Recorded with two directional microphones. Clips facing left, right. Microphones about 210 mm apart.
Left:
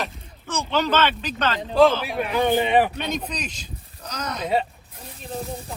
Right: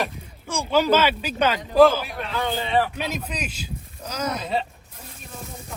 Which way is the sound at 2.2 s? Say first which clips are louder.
Left 9 dB; 15° left (ahead or behind).